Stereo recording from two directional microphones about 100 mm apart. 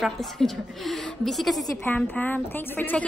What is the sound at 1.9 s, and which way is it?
Speech, 20° left (ahead or behind).